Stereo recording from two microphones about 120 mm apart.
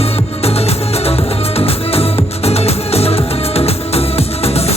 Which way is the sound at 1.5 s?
55° left (ahead or behind).